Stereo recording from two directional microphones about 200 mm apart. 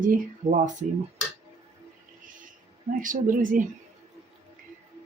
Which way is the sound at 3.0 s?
40° right (ahead or behind).